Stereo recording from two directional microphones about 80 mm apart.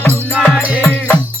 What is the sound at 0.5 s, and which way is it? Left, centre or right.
Music, centre.